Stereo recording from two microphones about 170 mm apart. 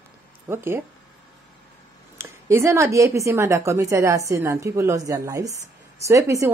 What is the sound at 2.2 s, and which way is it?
A woman's voice, 15° right (ahead or behind).